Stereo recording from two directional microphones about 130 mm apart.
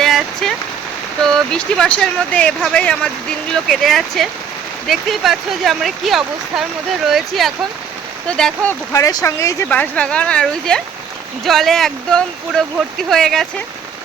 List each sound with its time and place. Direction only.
0.0 s rain on surface: 5° left (ahead or behind)
1.2 s speech: 5° left (ahead or behind)
8.9 s speech: 25° left (ahead or behind)
9.6 s speech: 10° left (ahead or behind)